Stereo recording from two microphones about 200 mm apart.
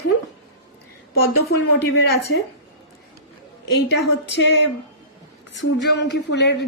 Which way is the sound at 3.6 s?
55° left (ahead or behind).